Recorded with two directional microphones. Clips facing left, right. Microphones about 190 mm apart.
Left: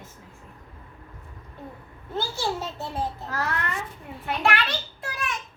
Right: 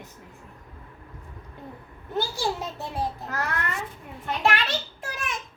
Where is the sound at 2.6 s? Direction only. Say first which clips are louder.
Even; 15° right (ahead or behind).